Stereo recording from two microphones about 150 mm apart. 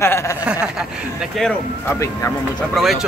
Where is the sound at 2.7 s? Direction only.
Centre (ahead or behind).